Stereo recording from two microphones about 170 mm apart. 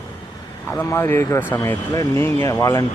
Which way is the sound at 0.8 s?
15° left (ahead or behind).